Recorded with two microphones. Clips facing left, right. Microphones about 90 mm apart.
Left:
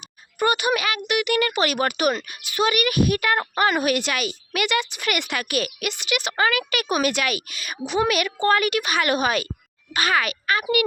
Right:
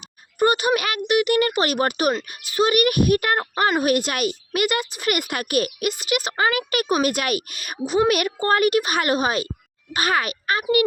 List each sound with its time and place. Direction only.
0.3 s speech: 40° right (ahead or behind)